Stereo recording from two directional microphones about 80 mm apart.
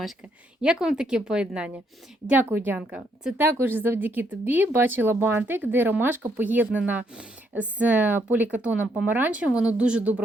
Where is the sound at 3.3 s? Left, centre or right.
Right.